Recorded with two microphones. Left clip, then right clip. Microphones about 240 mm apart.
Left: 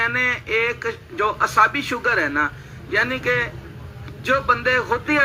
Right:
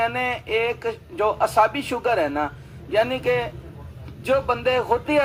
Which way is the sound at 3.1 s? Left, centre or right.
Centre.